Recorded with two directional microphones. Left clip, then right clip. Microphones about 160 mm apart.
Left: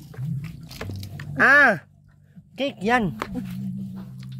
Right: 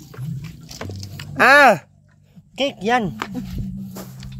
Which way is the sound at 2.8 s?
10° left (ahead or behind).